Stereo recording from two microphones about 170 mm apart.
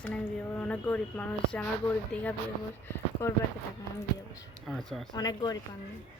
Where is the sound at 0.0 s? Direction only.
5° left (ahead or behind).